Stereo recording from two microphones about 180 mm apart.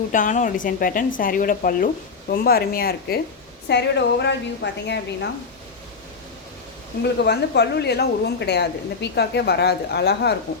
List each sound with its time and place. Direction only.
0.1 s speech: 45° left (ahead or behind)
3.7 s a woman's voice: 70° left (ahead or behind)
7.0 s a woman's voice: 70° left (ahead or behind)